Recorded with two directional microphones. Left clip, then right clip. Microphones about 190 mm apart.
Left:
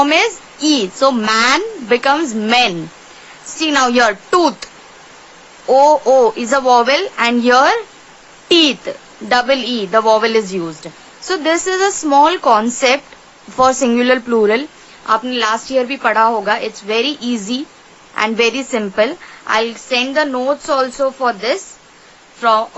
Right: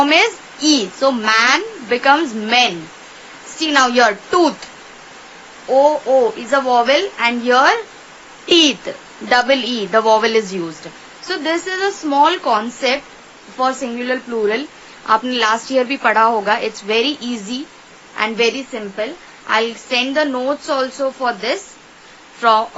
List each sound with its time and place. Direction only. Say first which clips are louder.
0.0 s a woman's voice: even; 20° left (ahead or behind)
5.9 s a woman's voice: left 4 dB; 30° left (ahead or behind)
11.3 s a woman's voice: left 4 dB; 30° left (ahead or behind)
15.0 s a woman's voice: even; 15° left (ahead or behind)